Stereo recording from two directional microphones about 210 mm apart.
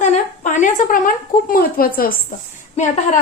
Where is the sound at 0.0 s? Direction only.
35° left (ahead or behind).